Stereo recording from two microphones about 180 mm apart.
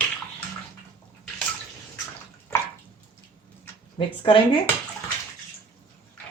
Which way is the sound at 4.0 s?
30° left (ahead or behind).